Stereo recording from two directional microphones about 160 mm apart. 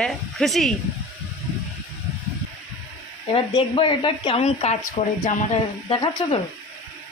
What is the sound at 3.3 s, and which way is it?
Speech, 30° left (ahead or behind).